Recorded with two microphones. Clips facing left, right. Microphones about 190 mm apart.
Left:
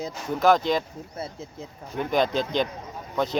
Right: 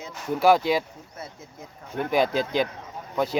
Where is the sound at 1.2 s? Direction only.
30° left (ahead or behind).